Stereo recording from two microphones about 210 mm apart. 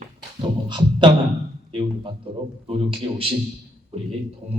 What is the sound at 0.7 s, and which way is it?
Beatboxing, 20° right (ahead or behind).